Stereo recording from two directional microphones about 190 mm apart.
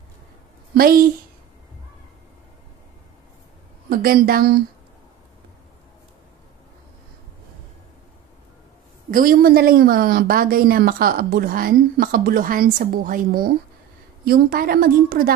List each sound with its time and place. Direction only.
0.7 s a woman's voice: 50° right (ahead or behind)
3.9 s a woman's voice: 50° right (ahead or behind)
9.1 s a woman's voice: 50° right (ahead or behind)